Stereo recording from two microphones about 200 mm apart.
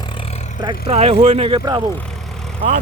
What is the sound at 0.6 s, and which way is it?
Speech, 25° right (ahead or behind).